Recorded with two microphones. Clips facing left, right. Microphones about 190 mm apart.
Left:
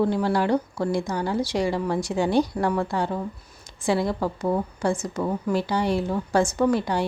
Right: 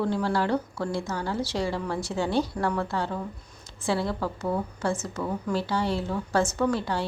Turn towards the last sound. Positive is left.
turn(degrees=15)  # may be behind; listen again after turning